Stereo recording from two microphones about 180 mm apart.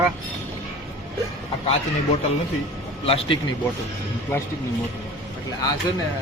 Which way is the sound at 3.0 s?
30° left (ahead or behind).